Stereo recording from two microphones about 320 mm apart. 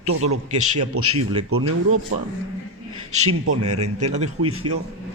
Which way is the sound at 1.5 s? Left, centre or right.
Right.